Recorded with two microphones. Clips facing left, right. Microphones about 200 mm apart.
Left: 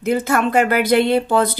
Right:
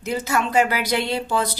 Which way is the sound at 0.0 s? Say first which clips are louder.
Left 6 dB; 55° left (ahead or behind).